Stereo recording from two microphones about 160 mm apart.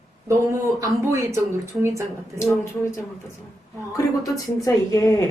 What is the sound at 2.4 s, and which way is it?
Speech, 20° left (ahead or behind).